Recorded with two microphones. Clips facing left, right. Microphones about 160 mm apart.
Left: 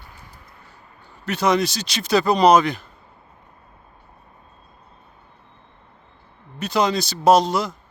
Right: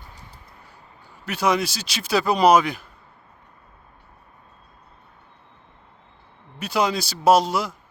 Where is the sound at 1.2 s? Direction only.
10° right (ahead or behind).